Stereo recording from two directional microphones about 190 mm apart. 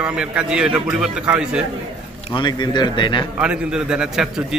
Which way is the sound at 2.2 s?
25° left (ahead or behind).